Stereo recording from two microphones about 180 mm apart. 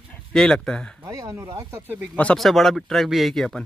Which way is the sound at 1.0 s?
15° right (ahead or behind).